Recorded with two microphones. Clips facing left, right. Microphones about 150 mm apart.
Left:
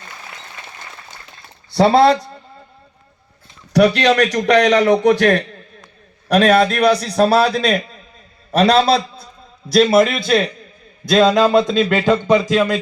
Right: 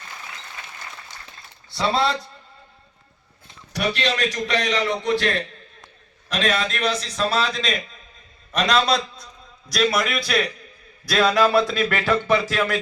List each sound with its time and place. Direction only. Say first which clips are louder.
3.7 s a man's voice: left 11 dB; 45° left (ahead or behind); by 12.8 s 20° left (ahead or behind)